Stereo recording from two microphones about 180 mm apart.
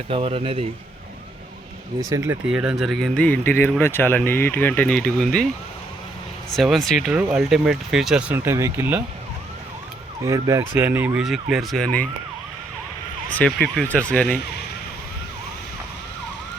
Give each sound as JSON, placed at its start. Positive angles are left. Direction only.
{"t": 0.1, "sound": "speech", "side_deg": -30}
{"t": 2.0, "sound": "speech", "side_deg": -15}
{"t": 6.5, "sound": "speech", "side_deg": 0}
{"t": 8.4, "sound": "speech", "side_deg": -15}
{"t": 10.2, "sound": "speech", "side_deg": -20}
{"t": 13.4, "sound": "speech", "side_deg": 10}